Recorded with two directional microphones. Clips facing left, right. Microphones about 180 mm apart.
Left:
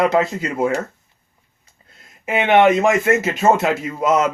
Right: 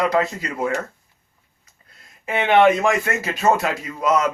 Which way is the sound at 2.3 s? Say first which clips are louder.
Left 2 dB; 20° left (ahead or behind).